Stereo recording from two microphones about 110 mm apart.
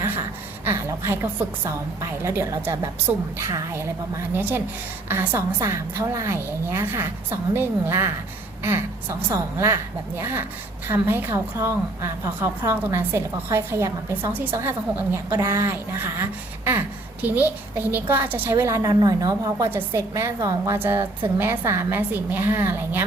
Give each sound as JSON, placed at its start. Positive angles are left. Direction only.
{"t": 0.6, "sound": "a woman's voice", "side_deg": -25}
{"t": 4.4, "sound": "a woman's voice", "side_deg": -15}
{"t": 18.5, "sound": "a woman's voice", "side_deg": -30}
{"t": 20.7, "sound": "a woman's voice", "side_deg": -20}